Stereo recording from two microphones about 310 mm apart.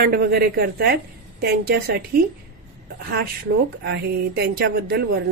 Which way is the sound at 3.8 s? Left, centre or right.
Right.